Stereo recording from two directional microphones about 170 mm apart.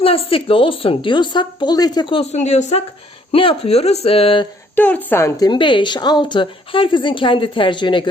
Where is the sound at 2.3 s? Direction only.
40° left (ahead or behind).